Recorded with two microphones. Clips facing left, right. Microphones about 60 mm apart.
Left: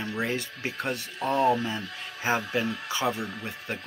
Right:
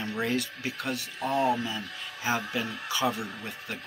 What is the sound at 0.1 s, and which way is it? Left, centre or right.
Speech, centre.